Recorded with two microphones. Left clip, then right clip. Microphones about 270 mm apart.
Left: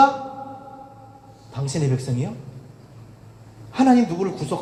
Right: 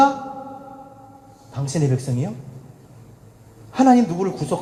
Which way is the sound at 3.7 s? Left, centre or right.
Right.